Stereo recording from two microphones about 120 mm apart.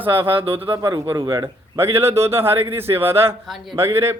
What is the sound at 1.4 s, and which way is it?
A man's voice, 20° right (ahead or behind).